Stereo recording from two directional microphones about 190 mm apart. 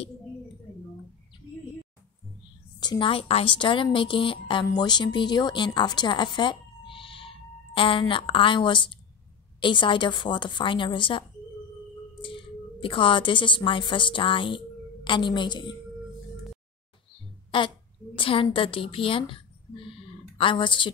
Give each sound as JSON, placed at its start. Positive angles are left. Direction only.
{"t": 2.8, "sound": "a woman's voice", "side_deg": 25}
{"t": 17.5, "sound": "a woman's voice", "side_deg": 25}